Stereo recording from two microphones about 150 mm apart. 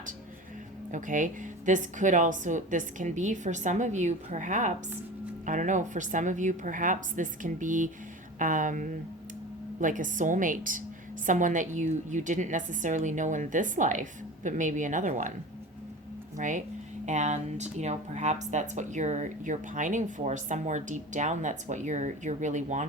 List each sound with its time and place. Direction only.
0.9 s a woman's voice: 60° right (ahead or behind)
16.4 s a woman's voice: 55° right (ahead or behind)